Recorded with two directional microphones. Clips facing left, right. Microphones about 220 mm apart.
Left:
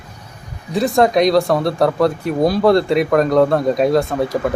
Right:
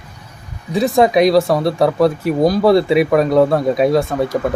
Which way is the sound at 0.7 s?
Centre (ahead or behind).